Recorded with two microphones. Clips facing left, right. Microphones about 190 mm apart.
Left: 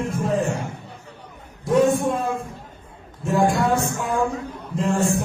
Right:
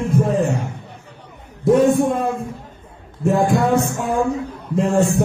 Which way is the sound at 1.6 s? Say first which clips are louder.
Right 4 dB; 60° right (ahead or behind).